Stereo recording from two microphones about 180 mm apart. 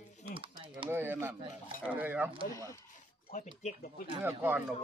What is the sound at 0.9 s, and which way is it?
Speech, 10° right (ahead or behind).